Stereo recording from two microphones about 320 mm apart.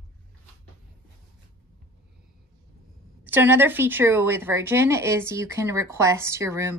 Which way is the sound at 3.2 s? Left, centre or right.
Centre.